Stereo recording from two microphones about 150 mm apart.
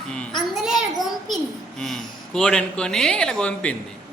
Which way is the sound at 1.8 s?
5° left (ahead or behind).